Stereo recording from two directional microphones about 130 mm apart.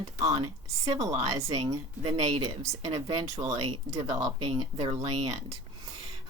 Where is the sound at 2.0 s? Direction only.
50° right (ahead or behind).